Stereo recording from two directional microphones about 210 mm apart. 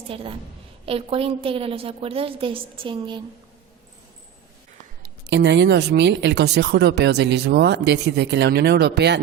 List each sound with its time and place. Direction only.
0.1 s a woman's voice: 25° right (ahead or behind)
5.0 s speech: 55° right (ahead or behind)